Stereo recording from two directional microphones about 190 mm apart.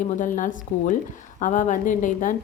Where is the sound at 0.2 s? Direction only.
45° left (ahead or behind).